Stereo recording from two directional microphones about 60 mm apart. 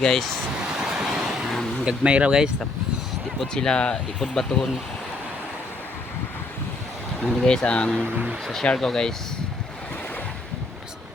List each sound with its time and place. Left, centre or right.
0.0 s speech: centre
0.6 s vehicle: centre
1.8 s speech: centre
3.4 s speech: centre
7.3 s speech: centre